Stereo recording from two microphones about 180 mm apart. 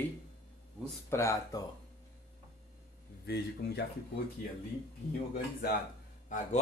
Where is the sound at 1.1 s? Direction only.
15° left (ahead or behind).